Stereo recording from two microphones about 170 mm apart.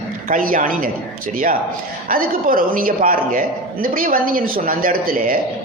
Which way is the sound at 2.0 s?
55° right (ahead or behind).